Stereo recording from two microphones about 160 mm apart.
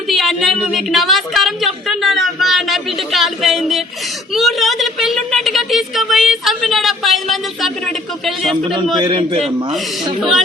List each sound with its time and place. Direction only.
0.1 s a woman's voice: centre (ahead or behind)
9.0 s a man's voice: 30° right (ahead or behind)